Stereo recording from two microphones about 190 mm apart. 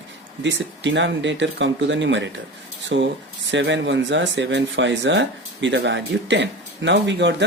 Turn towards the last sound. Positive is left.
turn(degrees=-70)  # may be behind; listen again after turning